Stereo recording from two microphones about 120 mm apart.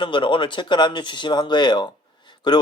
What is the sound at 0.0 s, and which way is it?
Speech, 45° left (ahead or behind).